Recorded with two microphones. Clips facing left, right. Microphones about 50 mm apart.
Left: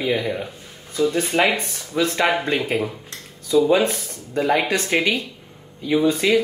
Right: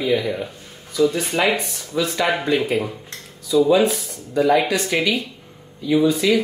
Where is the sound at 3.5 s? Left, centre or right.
Left.